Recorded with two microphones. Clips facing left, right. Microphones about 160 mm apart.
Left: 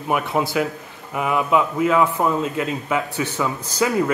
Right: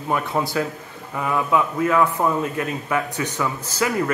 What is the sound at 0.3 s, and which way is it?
A man's voice, 10° left (ahead or behind).